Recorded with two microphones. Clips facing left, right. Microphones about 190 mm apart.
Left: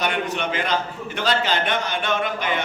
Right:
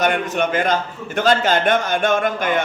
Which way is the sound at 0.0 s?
45° right (ahead or behind).